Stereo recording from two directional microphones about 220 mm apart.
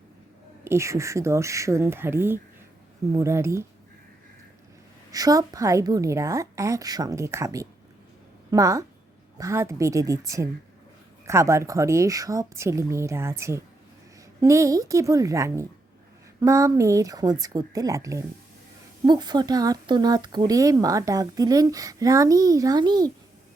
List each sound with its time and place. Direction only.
0.6 s speech: 10° right (ahead or behind)
5.1 s speech: 15° right (ahead or behind)